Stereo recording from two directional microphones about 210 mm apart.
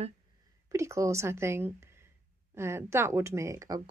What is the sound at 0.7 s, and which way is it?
A woman's voice, 15° right (ahead or behind).